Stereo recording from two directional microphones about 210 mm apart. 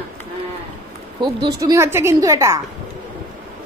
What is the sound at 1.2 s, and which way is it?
A woman's voice, 20° right (ahead or behind).